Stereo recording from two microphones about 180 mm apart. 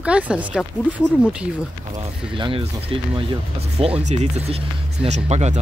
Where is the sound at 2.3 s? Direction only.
30° right (ahead or behind).